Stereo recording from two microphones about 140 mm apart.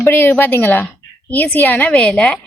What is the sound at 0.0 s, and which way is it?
A woman's voice, 15° left (ahead or behind).